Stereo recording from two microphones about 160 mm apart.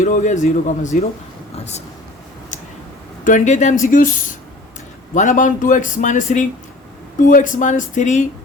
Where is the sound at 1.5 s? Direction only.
45° left (ahead or behind).